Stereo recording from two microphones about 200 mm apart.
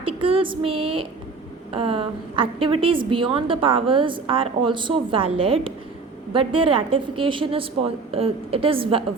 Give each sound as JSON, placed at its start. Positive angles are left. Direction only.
{"t": 0.0, "sound": "female singing", "side_deg": -25}
{"t": 1.7, "sound": "a woman's voice", "side_deg": -25}